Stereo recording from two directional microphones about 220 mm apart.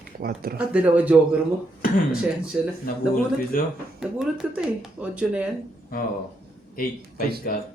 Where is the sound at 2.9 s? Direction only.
40° left (ahead or behind).